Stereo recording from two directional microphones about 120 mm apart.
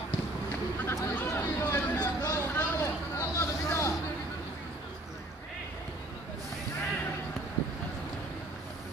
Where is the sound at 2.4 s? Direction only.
20° left (ahead or behind).